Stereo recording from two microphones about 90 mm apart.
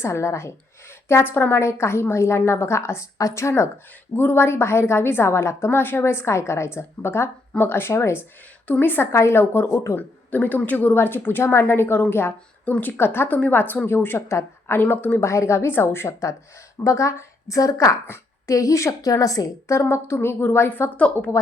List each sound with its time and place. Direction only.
0.0 s a woman's voice: 30° left (ahead or behind)
8.6 s a woman's voice: 20° left (ahead or behind)
9.6 s a woman's voice: 40° left (ahead or behind)
9.9 s a woman's voice: 20° left (ahead or behind); by 19.8 s 35° left (ahead or behind)
19.8 s a woman's voice: 25° left (ahead or behind)